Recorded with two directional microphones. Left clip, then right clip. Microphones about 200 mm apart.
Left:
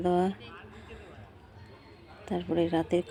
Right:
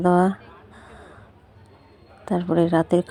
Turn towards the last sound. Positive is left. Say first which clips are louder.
# right 8 dB
turn(degrees=-30)  # may be behind; listen again after turning